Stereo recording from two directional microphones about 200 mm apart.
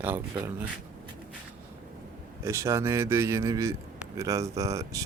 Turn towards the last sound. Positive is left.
turn(degrees=-15)  # may be behind; listen again after turning